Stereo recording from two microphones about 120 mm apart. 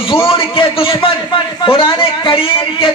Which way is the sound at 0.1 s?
50° left (ahead or behind).